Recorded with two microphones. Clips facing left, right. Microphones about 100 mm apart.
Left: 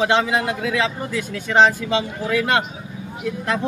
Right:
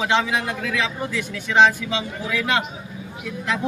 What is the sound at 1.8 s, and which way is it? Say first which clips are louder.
Speech: left 4 dB; 40° left (ahead or behind).